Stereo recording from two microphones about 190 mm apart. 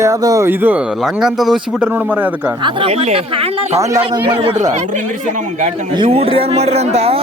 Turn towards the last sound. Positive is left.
turn(degrees=-30)  # may be behind; listen again after turning